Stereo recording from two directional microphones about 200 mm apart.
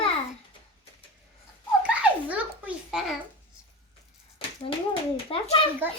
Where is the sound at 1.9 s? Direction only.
5° right (ahead or behind).